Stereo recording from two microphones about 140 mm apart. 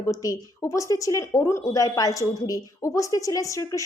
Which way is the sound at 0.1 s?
25° left (ahead or behind).